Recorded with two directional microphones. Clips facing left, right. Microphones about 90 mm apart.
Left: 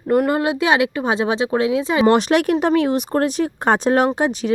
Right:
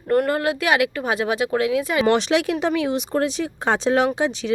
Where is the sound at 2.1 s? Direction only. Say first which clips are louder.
Left 4 dB; 50° left (ahead or behind).